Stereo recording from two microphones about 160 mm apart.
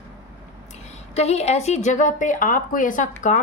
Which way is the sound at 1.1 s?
40° left (ahead or behind).